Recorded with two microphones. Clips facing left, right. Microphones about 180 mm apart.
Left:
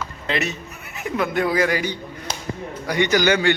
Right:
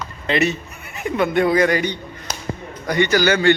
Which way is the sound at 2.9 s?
15° left (ahead or behind).